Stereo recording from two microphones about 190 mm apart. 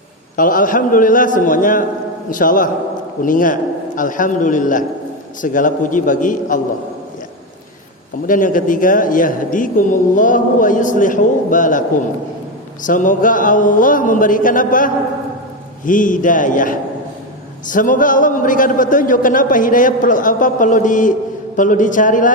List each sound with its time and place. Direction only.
0.3 s a man's voice: 45° left (ahead or behind)
8.3 s a man's voice: 45° left (ahead or behind)